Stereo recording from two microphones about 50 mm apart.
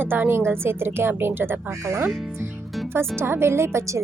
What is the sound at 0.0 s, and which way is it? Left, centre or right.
A woman's voice, right.